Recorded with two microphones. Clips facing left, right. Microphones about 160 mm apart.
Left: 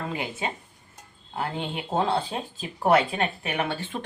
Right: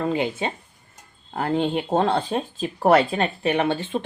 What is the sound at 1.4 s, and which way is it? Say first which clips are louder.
Speech: right 8 dB; 40° right (ahead or behind).